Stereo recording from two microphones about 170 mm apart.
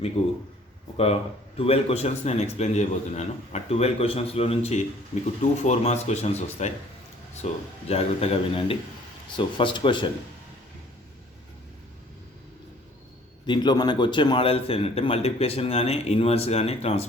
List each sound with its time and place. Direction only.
0.2 s speech: 40° left (ahead or behind)
13.5 s speech: 25° left (ahead or behind)